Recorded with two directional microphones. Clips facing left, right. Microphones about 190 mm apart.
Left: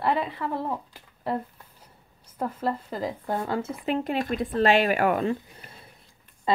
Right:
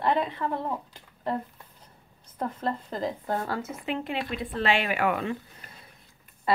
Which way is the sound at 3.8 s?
40° left (ahead or behind).